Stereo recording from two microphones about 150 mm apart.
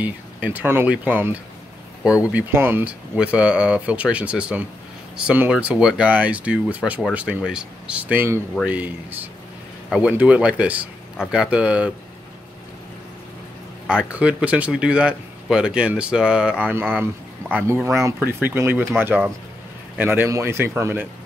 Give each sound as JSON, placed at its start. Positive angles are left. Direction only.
{"t": 0.0, "sound": "speech", "side_deg": -10}
{"t": 9.8, "sound": "speech", "side_deg": 0}
{"t": 13.8, "sound": "speech", "side_deg": -5}